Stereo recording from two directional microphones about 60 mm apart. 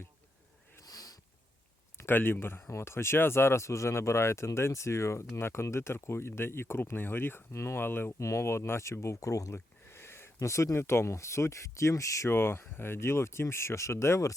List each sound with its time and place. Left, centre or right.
0.8 s sniff: left
2.0 s speech: left
8.2 s speech: left
9.6 s a sound: left
10.4 s speech: left
12.3 s speech: left